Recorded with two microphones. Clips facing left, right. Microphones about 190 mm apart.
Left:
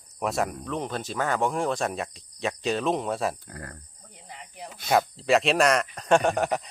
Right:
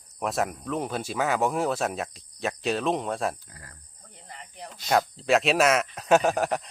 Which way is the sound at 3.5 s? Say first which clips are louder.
Left 10 dB; 60° left (ahead or behind).